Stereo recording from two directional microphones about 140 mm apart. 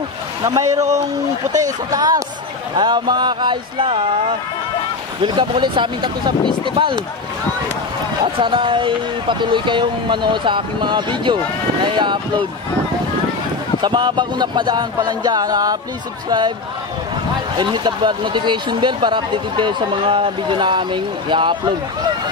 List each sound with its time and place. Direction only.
0.4 s speech: 25° right (ahead or behind)
5.2 s speech: 35° right (ahead or behind)
8.4 s speech: 35° right (ahead or behind)
13.7 s speech: 35° right (ahead or behind)
17.6 s speech: 35° right (ahead or behind)